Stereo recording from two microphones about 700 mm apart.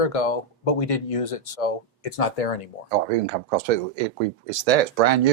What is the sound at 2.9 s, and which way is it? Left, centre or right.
Speech, right.